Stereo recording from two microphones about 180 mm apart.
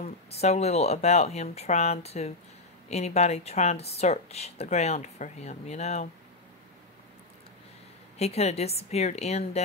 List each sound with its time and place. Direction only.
0.0 s speech: 35° left (ahead or behind)
8.2 s speech: 35° left (ahead or behind)